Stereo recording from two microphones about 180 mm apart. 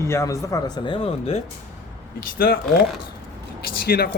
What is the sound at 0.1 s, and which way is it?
Speech, 15° left (ahead or behind).